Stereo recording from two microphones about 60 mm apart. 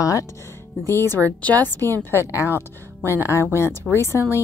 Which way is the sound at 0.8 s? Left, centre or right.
Left.